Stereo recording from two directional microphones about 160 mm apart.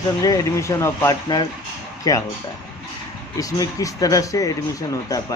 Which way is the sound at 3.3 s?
20° left (ahead or behind).